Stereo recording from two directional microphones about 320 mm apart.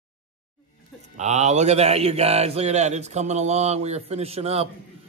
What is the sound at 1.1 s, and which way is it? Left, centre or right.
Speech, right.